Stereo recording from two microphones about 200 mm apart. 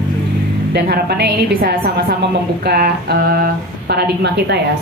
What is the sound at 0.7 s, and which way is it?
A woman's voice, 55° right (ahead or behind).